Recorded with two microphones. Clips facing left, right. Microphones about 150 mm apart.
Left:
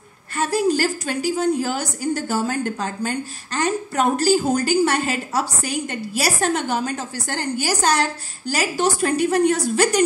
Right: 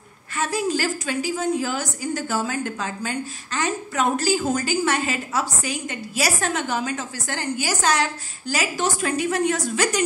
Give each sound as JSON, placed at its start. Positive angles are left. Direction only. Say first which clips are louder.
{"t": 0.4, "sound": "a woman's voice", "louder": "left 4 dB", "side_deg": 35}